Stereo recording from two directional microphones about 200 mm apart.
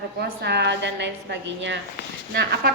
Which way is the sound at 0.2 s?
55° right (ahead or behind).